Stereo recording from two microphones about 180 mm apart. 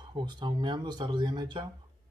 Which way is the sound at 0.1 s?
25° right (ahead or behind).